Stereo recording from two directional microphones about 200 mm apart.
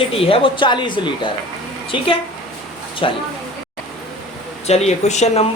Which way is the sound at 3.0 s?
25° left (ahead or behind).